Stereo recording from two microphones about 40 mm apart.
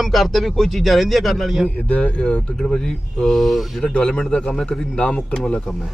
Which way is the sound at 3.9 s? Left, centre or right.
Left.